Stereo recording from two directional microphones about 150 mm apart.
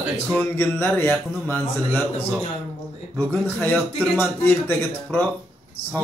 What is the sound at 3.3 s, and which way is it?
Speech, 10° left (ahead or behind).